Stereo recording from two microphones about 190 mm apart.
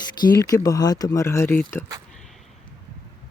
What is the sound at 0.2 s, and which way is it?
Speech, 20° left (ahead or behind).